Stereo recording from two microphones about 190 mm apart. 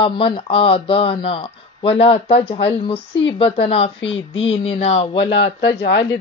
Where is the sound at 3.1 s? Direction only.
70° left (ahead or behind).